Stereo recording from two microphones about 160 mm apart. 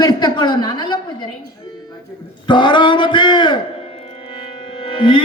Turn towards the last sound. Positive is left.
turn(degrees=30)  # may be behind; listen again after turning